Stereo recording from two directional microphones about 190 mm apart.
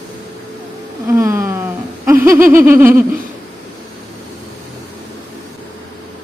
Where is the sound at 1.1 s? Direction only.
15° right (ahead or behind).